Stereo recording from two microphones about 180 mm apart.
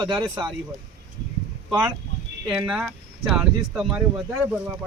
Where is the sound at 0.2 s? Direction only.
25° right (ahead or behind).